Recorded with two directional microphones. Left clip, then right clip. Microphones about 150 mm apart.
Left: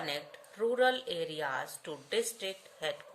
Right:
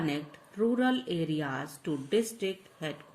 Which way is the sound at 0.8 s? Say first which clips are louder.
Left 1 dB; 30° left (ahead or behind).